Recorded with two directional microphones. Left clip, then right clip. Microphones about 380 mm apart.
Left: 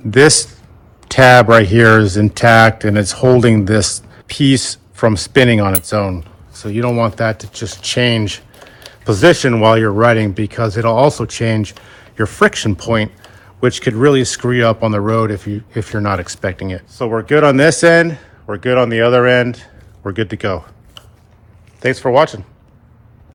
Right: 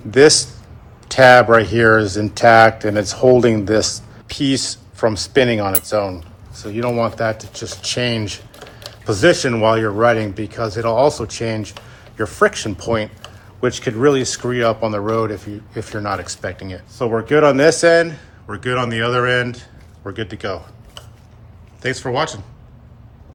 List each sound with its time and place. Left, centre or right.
0.1 s speech: centre
21.8 s speech: centre